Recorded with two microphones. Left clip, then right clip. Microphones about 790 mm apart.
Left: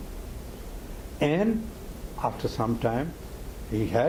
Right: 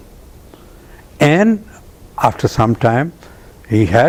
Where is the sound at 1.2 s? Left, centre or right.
Right.